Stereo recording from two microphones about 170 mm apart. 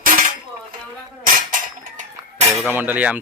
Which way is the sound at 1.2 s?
55° right (ahead or behind).